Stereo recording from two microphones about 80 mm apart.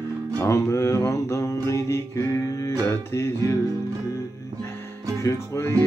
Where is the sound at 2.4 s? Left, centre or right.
Left.